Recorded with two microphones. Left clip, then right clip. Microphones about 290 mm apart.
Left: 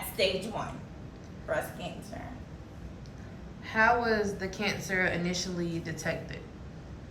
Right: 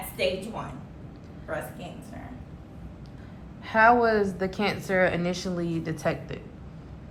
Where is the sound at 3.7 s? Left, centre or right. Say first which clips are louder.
Right 6 dB; centre.